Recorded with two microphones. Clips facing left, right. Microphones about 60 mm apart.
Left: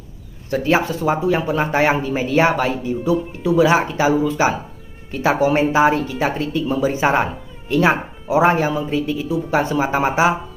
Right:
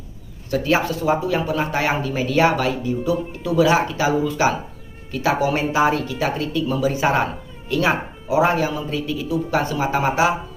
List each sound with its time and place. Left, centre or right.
0.5 s speech: centre